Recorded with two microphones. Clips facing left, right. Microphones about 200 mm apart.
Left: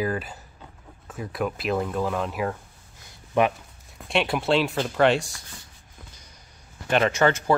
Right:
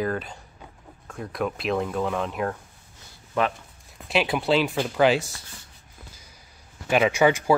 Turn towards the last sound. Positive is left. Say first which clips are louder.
# right 1 dB
turn(degrees=-10)  # may be behind; listen again after turning